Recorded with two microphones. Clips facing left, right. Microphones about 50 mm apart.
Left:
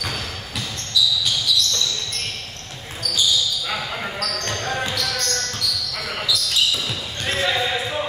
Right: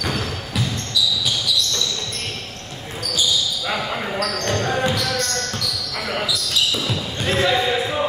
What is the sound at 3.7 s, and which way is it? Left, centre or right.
Basketball bounce, centre.